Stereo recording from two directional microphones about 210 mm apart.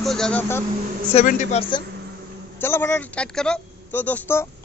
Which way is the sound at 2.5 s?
10° left (ahead or behind).